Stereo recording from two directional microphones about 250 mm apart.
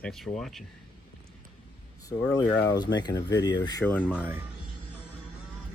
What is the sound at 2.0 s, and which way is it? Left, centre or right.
Speech, centre.